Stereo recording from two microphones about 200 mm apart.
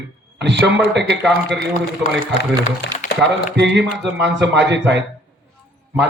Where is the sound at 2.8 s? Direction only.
55° left (ahead or behind).